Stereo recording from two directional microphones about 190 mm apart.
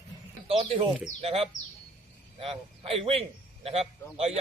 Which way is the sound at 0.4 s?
30° right (ahead or behind).